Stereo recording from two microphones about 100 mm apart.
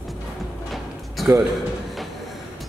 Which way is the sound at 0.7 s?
Centre (ahead or behind).